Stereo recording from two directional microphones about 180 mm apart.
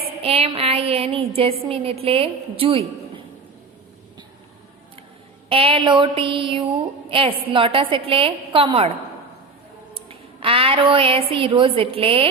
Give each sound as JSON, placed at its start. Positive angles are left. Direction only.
{"t": 0.2, "sound": "a woman's voice", "side_deg": -35}
{"t": 5.5, "sound": "a woman's voice", "side_deg": -30}
{"t": 9.9, "sound": "a woman's voice", "side_deg": -30}